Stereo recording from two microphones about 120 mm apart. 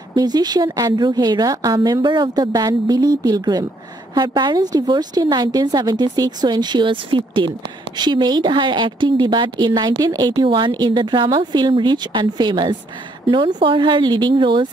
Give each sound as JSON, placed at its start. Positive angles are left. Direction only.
{"t": 0.1, "sound": "a woman's voice", "side_deg": -35}